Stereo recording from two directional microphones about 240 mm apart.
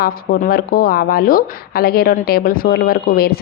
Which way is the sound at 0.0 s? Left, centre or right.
Left.